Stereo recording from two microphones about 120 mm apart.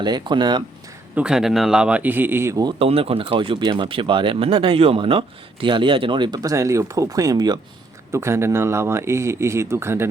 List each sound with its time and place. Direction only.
0.0 s speech: 40° right (ahead or behind)
1.1 s a man's voice: 5° right (ahead or behind); by 2.7 s 30° right (ahead or behind)
2.7 s speech: 55° right (ahead or behind); by 7.6 s 35° right (ahead or behind)
8.1 s speech: 20° right (ahead or behind)